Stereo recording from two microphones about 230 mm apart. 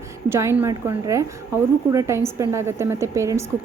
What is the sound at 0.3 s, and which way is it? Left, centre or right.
A woman's voice, centre.